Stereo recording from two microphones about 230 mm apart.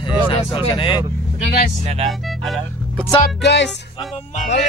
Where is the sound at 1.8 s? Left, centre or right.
Right.